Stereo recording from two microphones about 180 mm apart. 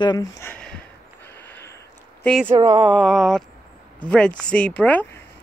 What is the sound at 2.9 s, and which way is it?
Speech, centre (ahead or behind).